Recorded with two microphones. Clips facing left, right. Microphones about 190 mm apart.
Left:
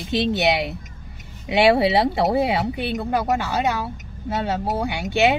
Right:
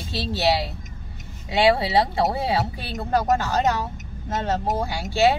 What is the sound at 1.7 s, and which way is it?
Speech, 20° left (ahead or behind).